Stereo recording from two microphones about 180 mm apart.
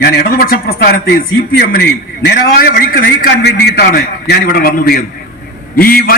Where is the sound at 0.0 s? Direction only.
60° left (ahead or behind).